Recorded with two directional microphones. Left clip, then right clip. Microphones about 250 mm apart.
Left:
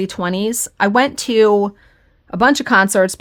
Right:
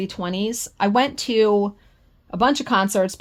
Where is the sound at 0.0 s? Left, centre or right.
Left.